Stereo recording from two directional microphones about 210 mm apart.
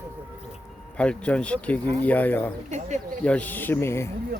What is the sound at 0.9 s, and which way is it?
Speech, 5° left (ahead or behind).